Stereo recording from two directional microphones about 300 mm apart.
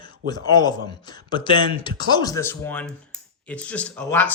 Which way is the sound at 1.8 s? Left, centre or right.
Centre.